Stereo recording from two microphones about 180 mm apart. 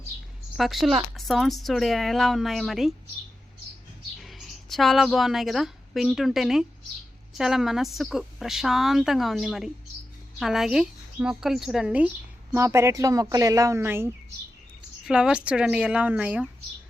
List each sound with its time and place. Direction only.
0.5 s a woman's voice: centre (ahead or behind)
4.2 s a woman's voice: centre (ahead or behind)